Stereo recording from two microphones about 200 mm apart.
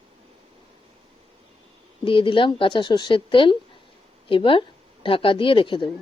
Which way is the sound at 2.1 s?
25° left (ahead or behind).